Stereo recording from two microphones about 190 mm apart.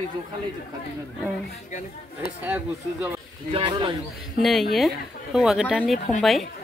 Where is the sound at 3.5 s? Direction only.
25° right (ahead or behind).